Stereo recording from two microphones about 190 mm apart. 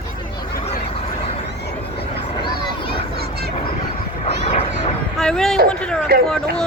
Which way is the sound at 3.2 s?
55° right (ahead or behind).